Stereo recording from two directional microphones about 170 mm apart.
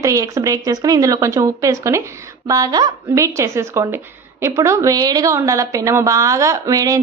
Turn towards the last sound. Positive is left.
turn(degrees=-20)  # may be behind; listen again after turning